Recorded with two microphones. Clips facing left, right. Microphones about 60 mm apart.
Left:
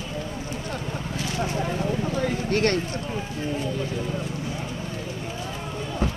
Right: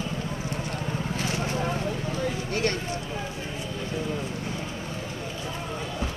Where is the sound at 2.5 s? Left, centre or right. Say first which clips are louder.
Left 6 dB; left.